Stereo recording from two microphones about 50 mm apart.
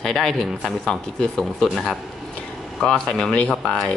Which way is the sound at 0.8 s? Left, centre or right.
Centre.